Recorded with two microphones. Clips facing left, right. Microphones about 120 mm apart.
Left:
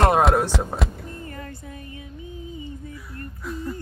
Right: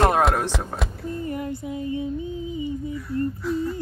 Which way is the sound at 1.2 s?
20° right (ahead or behind).